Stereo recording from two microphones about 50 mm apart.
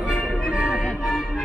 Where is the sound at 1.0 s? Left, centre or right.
Centre.